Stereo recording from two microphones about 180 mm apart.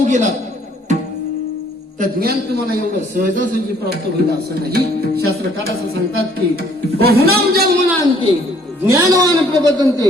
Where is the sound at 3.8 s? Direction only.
60° right (ahead or behind).